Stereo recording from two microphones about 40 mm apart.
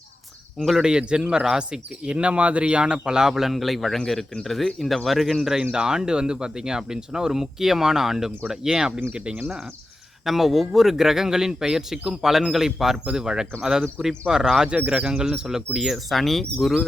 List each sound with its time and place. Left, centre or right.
0.8 s a man's voice: right
9.1 s speech: right
10.2 s a man's voice: centre
14.7 s speech: right
15.1 s a man's voice: centre